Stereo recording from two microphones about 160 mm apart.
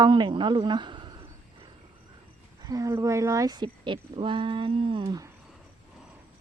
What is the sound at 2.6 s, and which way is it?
Speech, 20° right (ahead or behind).